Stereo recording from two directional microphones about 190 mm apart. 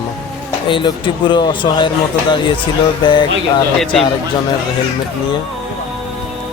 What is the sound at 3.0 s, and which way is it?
Speech, 25° left (ahead or behind).